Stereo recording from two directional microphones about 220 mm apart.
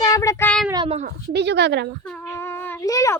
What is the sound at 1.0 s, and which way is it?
Speech, 50° right (ahead or behind).